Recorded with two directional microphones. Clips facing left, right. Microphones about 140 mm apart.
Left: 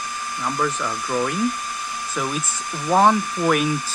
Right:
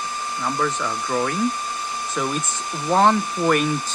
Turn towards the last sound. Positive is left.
turn(degrees=5)  # may be behind; listen again after turning